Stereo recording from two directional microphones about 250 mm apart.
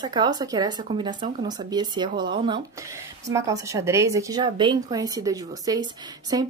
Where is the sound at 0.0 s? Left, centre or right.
Centre.